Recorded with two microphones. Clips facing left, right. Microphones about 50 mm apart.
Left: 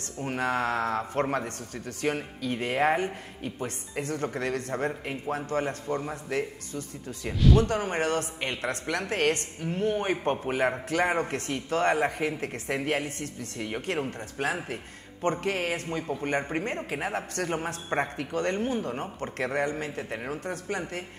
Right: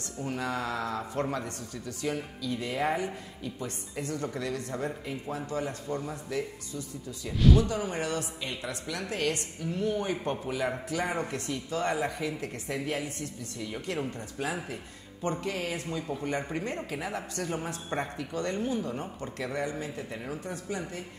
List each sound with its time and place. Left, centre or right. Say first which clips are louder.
0.2 s speech: left 4 dB; left
7.6 s a man's voice: left 4 dB; left
17.8 s a man's voice: left 5 dB; left
18.1 s speech: left 4 dB; left